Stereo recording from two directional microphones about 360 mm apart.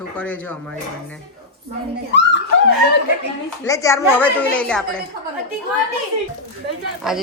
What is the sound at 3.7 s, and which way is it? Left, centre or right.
Speech, centre.